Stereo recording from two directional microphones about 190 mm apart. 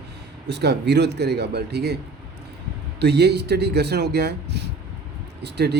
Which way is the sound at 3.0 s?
60° right (ahead or behind).